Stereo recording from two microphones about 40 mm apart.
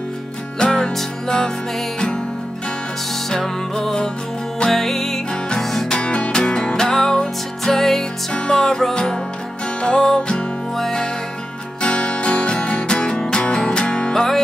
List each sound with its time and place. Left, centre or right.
0.6 s music: left
3.3 s music: centre
5.9 s music: left; by 8.1 s centre
8.3 s music: left